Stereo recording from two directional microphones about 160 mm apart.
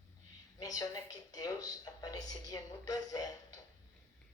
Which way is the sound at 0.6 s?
20° left (ahead or behind).